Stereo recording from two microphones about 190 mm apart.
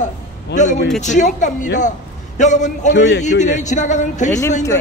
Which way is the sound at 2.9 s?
70° left (ahead or behind).